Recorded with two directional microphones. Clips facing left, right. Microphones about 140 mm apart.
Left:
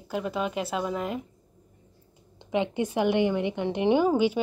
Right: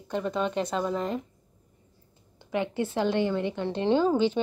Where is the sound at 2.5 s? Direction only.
20° left (ahead or behind).